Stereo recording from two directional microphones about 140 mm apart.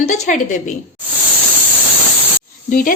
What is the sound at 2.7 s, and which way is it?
Speech, 75° left (ahead or behind).